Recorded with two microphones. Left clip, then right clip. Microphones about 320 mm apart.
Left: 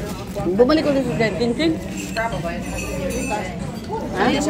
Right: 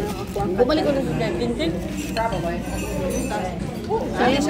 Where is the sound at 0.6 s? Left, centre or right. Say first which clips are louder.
Left 3 dB; left.